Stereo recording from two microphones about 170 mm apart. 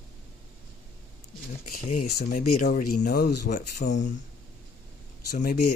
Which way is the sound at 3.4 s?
45° left (ahead or behind).